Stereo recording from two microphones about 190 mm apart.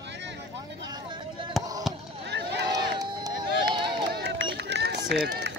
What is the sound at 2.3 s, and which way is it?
Run, 60° right (ahead or behind).